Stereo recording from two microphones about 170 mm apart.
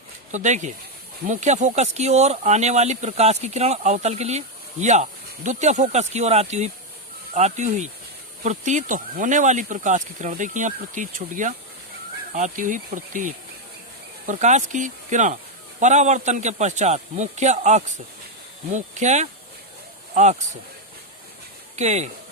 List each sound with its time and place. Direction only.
0.3 s speech: 45° right (ahead or behind)
21.8 s speech: 40° right (ahead or behind)